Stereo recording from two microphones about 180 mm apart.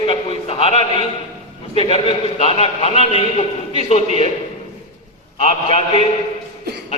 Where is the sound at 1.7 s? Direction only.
35° left (ahead or behind).